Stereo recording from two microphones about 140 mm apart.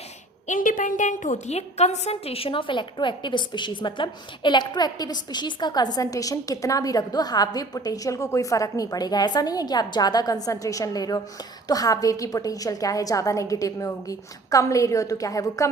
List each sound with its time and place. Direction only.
0.4 s a woman's voice: 70° left (ahead or behind); by 15.7 s 25° left (ahead or behind)